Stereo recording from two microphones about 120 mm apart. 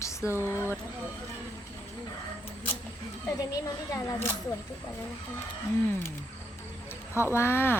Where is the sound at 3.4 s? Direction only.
30° left (ahead or behind).